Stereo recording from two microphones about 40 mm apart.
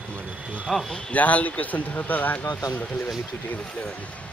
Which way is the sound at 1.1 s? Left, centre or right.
Left.